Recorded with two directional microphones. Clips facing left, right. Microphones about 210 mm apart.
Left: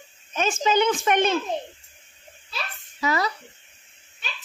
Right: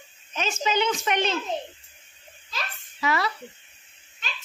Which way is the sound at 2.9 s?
40° left (ahead or behind).